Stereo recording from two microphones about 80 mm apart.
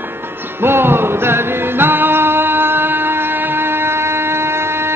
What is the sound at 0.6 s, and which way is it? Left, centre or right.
Music, right.